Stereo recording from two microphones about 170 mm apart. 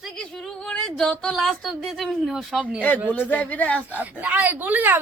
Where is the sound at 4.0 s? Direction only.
10° right (ahead or behind).